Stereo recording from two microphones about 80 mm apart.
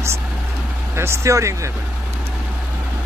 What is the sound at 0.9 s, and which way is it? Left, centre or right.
Speech, right.